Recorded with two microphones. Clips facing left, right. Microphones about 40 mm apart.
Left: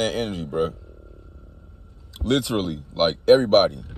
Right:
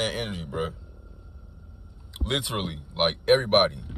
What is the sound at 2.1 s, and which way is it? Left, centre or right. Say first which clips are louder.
Speech: left 7 dB; right.